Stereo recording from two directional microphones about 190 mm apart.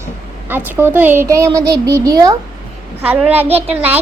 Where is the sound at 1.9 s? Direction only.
20° right (ahead or behind).